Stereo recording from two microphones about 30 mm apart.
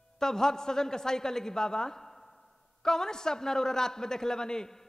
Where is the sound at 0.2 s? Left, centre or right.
Centre.